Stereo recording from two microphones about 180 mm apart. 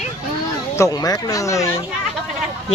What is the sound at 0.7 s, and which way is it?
Speech, 20° left (ahead or behind).